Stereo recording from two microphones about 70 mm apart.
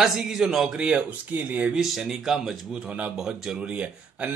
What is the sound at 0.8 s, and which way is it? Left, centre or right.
Speech, centre.